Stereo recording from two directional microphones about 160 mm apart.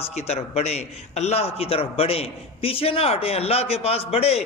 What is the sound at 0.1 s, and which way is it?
A man's voice, 40° left (ahead or behind).